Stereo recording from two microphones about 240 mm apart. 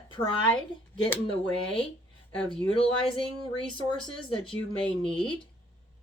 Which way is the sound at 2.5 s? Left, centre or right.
Left.